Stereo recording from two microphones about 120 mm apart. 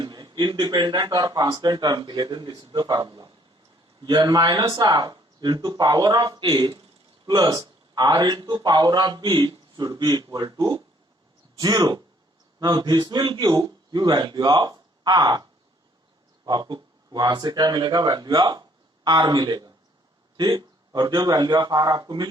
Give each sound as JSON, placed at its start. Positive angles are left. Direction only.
{"t": 0.0, "sound": "a man's voice", "side_deg": -35}
{"t": 16.5, "sound": "a man's voice", "side_deg": -35}